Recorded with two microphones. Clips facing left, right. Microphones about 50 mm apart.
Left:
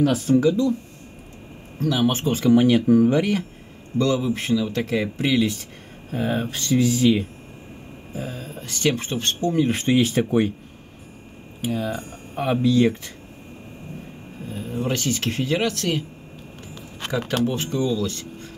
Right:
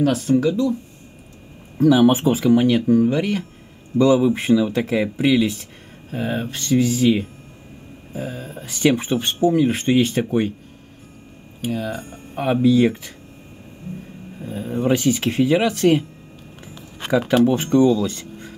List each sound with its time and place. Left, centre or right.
0.0 s speech: centre
1.8 s speech: centre
4.0 s speech: centre
11.6 s speech: centre
14.4 s speech: centre
15.8 s speech: right
17.2 s speech: centre